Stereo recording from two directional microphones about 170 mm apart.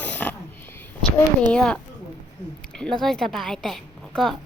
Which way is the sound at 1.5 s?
5° left (ahead or behind).